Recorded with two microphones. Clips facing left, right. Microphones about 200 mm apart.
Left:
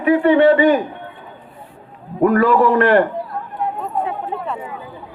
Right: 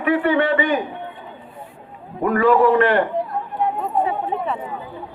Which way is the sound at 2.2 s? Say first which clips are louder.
Left 2 dB; 40° left (ahead or behind).